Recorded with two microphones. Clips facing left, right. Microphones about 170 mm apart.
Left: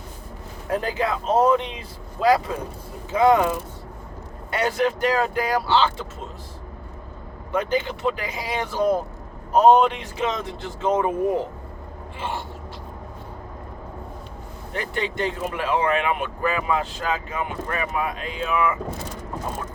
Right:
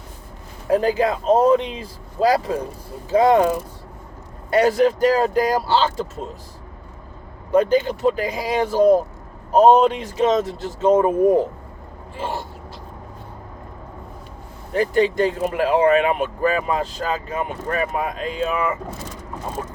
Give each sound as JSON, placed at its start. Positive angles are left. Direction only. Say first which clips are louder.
{"t": 0.7, "sound": "speech", "louder": "right 6 dB", "side_deg": -35}
{"t": 4.5, "sound": "speech", "louder": "right 6 dB", "side_deg": -40}
{"t": 7.5, "sound": "speech", "louder": "right 7 dB", "side_deg": -40}
{"t": 14.7, "sound": "speech", "louder": "right 10 dB", "side_deg": -40}